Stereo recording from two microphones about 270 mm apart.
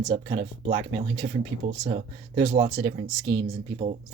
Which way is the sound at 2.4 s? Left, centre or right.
Centre.